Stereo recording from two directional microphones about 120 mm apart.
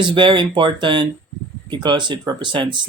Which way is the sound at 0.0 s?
40° right (ahead or behind).